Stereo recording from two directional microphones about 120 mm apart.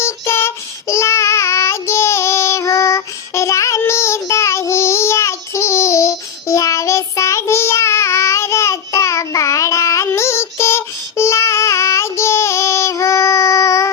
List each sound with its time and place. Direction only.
0.0 s child singing: 20° left (ahead or behind)